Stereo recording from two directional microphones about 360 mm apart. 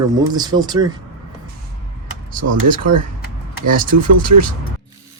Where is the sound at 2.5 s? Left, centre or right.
Right.